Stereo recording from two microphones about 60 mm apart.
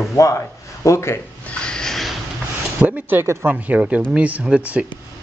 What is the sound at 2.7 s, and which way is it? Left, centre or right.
Speech, right.